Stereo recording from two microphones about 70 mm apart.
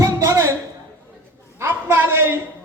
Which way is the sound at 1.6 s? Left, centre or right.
Right.